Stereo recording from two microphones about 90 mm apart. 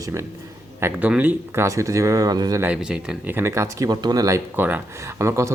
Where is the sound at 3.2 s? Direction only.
25° right (ahead or behind).